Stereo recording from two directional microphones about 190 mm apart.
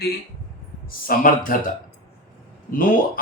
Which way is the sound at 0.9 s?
45° left (ahead or behind).